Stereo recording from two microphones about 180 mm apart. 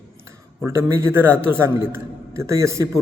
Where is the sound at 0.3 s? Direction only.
15° right (ahead or behind).